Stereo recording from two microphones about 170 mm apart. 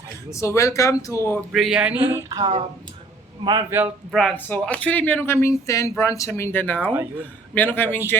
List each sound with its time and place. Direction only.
0.3 s speech: 15° left (ahead or behind)
1.5 s speech: 5° right (ahead or behind)
3.4 s a man's voice: 25° right (ahead or behind)
3.7 s speech: 10° right (ahead or behind)
4.1 s speech: centre (ahead or behind)
6.8 s speech: 10° right (ahead or behind)
7.5 s speech: 10° left (ahead or behind)